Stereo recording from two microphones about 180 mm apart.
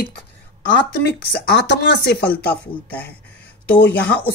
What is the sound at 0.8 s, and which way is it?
Speech, 70° left (ahead or behind).